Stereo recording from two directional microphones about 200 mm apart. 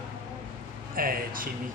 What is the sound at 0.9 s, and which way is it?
Speech, 45° right (ahead or behind).